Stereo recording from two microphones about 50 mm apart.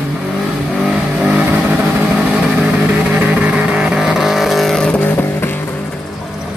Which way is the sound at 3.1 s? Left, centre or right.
Right.